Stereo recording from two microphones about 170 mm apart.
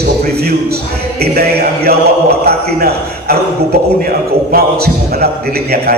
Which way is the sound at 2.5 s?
65° right (ahead or behind).